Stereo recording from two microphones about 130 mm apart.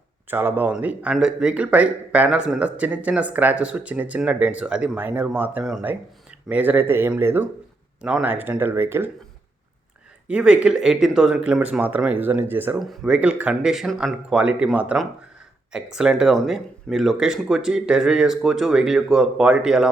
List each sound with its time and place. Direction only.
0.3 s speech: 15° right (ahead or behind)
10.2 s speech: 10° right (ahead or behind)
12.8 s speech: centre (ahead or behind)